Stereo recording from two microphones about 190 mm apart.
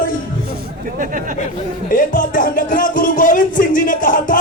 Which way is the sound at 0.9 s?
45° right (ahead or behind).